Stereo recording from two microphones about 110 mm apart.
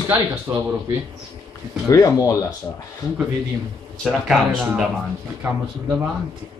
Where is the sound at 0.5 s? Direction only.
30° right (ahead or behind).